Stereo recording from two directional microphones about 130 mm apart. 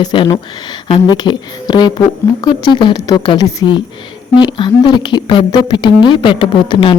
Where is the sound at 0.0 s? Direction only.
35° left (ahead or behind).